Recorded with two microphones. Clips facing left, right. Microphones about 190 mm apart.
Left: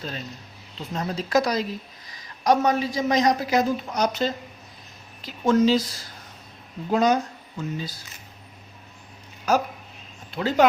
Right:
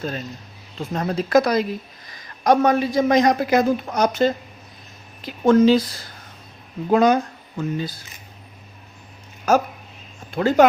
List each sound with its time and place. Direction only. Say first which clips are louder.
0.8 s speech: right 5 dB; 55° right (ahead or behind)
9.5 s speech: right 4 dB; 50° right (ahead or behind)